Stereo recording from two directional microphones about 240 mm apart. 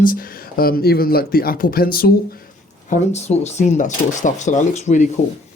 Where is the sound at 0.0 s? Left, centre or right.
Left.